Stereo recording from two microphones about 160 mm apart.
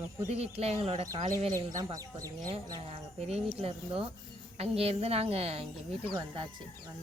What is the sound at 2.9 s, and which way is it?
Speech, 35° right (ahead or behind).